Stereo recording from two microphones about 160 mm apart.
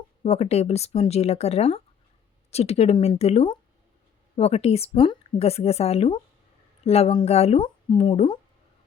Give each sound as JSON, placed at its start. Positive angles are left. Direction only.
{"t": 0.2, "sound": "a woman's voice", "side_deg": 40}